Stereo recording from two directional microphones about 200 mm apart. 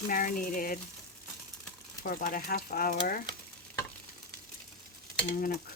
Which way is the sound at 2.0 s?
45° left (ahead or behind).